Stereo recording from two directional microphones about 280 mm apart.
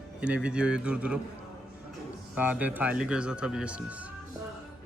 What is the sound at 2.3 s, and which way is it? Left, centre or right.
A man's voice, centre.